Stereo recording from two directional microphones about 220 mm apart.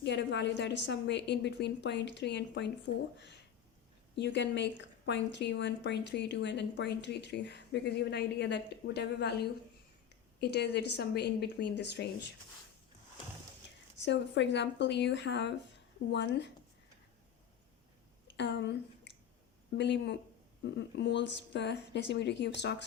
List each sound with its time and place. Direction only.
0.0 s speech: 55° left (ahead or behind)
14.0 s speech: 50° left (ahead or behind)
18.3 s speech: 50° left (ahead or behind)